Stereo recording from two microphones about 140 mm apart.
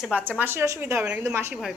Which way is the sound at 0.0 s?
10° right (ahead or behind).